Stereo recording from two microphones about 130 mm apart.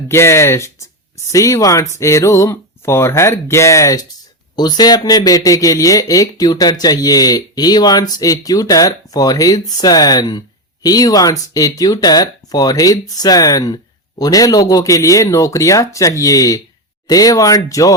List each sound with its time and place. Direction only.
0.1 s speech: 20° left (ahead or behind)